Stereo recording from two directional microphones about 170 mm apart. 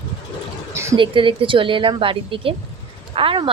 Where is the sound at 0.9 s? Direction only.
30° right (ahead or behind).